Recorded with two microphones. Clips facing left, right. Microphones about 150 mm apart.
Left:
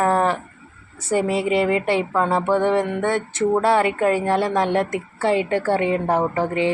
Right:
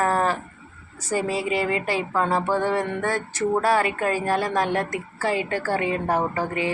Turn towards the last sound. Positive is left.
turn(degrees=25)  # may be behind; listen again after turning